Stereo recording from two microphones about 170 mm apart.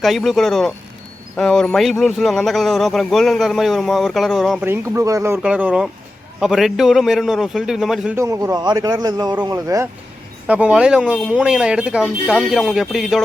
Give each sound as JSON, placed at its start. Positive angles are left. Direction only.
{"t": 0.0, "sound": "speech", "side_deg": 0}
{"t": 4.6, "sound": "speech", "side_deg": -15}
{"t": 8.1, "sound": "a man's voice", "side_deg": -20}